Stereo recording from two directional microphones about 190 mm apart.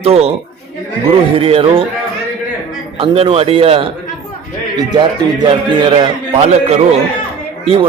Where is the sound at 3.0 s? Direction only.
30° right (ahead or behind).